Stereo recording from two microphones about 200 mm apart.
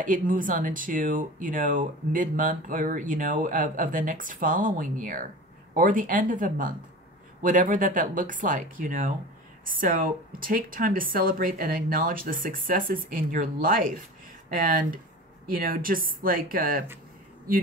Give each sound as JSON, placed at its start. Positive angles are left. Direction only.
{"t": 0.0, "sound": "speech", "side_deg": -40}